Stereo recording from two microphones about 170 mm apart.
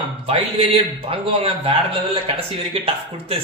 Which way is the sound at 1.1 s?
35° right (ahead or behind).